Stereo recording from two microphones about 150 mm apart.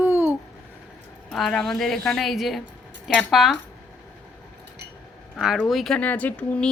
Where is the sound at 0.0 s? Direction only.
15° right (ahead or behind).